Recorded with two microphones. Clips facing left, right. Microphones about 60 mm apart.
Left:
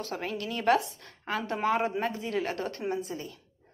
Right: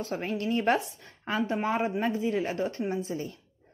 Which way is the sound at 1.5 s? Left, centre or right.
Centre.